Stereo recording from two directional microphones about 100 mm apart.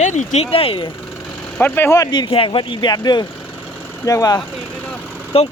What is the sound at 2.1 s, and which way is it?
Speech, 55° left (ahead or behind).